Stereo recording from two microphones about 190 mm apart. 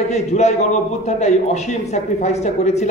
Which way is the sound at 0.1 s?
35° left (ahead or behind).